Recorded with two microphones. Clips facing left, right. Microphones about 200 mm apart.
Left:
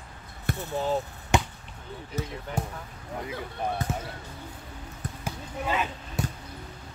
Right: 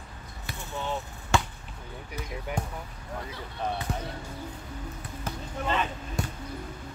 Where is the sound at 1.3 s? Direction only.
15° left (ahead or behind).